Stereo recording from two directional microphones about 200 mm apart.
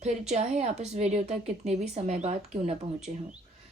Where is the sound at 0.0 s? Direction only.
35° right (ahead or behind).